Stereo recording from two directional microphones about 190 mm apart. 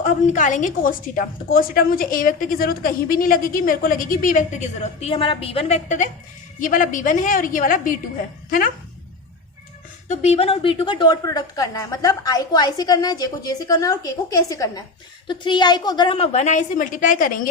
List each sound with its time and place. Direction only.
0.0 s a woman's voice: 40° left (ahead or behind)
10.1 s a woman's voice: 35° left (ahead or behind)